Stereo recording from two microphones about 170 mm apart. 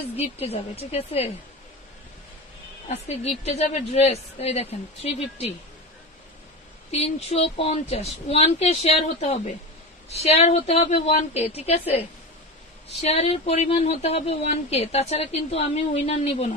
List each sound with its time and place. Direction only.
0.2 s speech: 35° left (ahead or behind)
3.4 s speech: 40° left (ahead or behind)
6.9 s speech: 40° left (ahead or behind)